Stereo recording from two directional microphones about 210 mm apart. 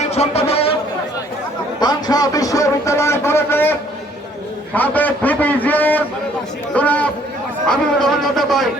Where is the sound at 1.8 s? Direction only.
20° left (ahead or behind).